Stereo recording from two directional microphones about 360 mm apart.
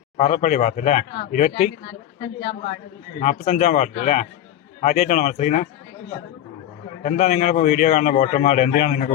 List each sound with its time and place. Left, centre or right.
0.2 s a man's voice: centre
3.2 s a man's voice: centre
7.0 s a man's voice: centre